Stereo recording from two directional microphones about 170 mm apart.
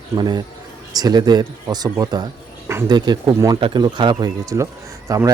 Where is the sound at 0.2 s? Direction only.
25° right (ahead or behind).